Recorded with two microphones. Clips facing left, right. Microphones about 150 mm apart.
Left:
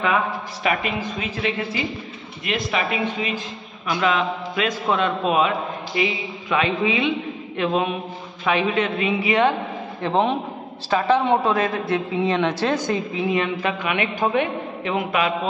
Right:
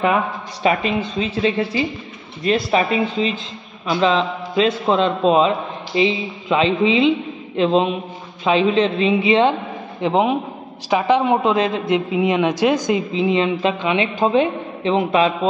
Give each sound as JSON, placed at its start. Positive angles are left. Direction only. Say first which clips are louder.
{"t": 0.7, "sound": "a woman's voice", "louder": "right 5 dB", "side_deg": -30}
{"t": 10.0, "sound": "a man's voice", "louder": "right 3 dB", "side_deg": -15}